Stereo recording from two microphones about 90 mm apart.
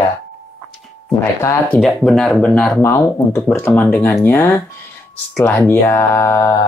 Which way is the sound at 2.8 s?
25° left (ahead or behind).